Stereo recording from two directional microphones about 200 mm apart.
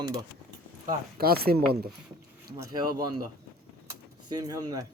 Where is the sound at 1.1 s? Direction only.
50° right (ahead or behind).